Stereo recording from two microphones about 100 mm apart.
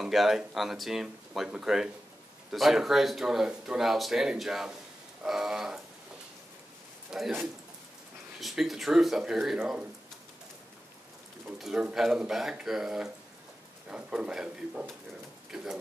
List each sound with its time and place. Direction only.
0.0 s speech: centre (ahead or behind)
7.1 s a man's voice: 5° right (ahead or behind)
8.4 s speech: centre (ahead or behind)
11.5 s a man's voice: 5° right (ahead or behind)